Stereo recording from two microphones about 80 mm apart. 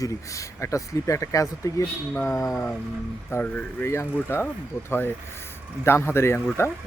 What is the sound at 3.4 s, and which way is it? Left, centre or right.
Speech, centre.